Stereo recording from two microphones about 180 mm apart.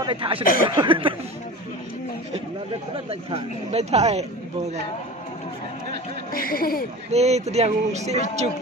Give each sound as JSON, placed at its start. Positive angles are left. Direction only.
{"t": 0.0, "sound": "speech", "side_deg": -30}
{"t": 0.4, "sound": "speech", "side_deg": 50}
{"t": 0.7, "sound": "speech", "side_deg": -25}
{"t": 3.1, "sound": "a sound", "side_deg": -30}
{"t": 6.3, "sound": "speech", "side_deg": 55}
{"t": 7.1, "sound": "a sound", "side_deg": -35}